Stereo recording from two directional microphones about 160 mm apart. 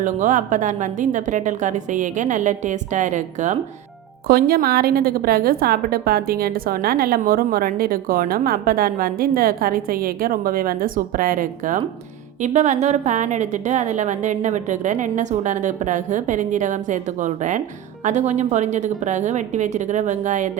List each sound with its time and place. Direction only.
0.0 s a woman's voice: 55° right (ahead or behind)
4.3 s a woman's voice: 70° right (ahead or behind)
12.4 s a woman's voice: 45° right (ahead or behind)